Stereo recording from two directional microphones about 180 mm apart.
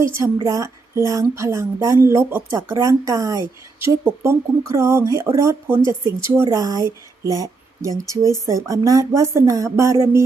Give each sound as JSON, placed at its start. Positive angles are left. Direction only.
{"t": 0.0, "sound": "a woman's voice", "side_deg": -15}